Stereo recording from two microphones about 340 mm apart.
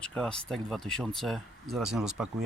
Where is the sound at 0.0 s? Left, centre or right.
Centre.